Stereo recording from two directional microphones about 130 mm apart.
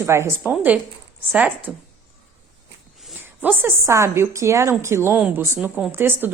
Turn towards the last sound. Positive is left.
turn(degrees=-15)  # may be behind; listen again after turning